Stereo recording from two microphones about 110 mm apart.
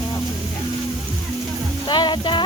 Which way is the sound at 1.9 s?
45° left (ahead or behind).